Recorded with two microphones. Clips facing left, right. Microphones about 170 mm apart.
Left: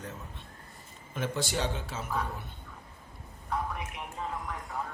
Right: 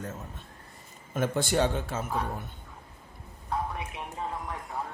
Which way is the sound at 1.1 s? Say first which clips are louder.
Right 6 dB; 50° right (ahead or behind).